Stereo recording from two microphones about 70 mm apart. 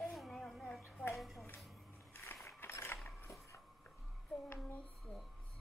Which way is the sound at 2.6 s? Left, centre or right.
Left.